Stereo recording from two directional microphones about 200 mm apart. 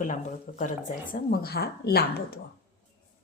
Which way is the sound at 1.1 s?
50° left (ahead or behind).